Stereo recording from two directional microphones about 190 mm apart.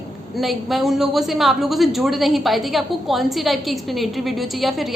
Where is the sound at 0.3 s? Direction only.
Centre (ahead or behind).